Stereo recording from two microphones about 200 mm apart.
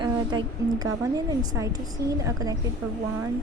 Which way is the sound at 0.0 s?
20° right (ahead or behind).